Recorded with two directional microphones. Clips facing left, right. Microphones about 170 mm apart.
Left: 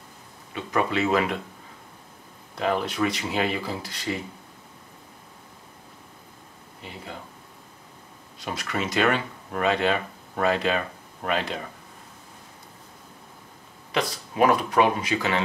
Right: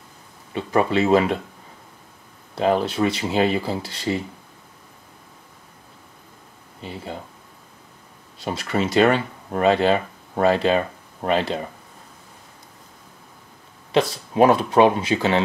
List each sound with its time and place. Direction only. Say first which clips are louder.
0.6 s speech: right 5 dB; 30° right (ahead or behind)
2.5 s speech: right 6 dB; 30° right (ahead or behind)
8.5 s speech: right 6 dB; 30° right (ahead or behind)
13.9 s speech: right 6 dB; 25° right (ahead or behind)